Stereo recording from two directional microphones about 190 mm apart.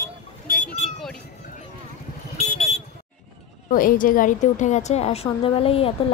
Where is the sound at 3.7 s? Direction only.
45° left (ahead or behind).